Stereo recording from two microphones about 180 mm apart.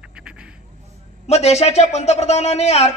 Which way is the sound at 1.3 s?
35° left (ahead or behind).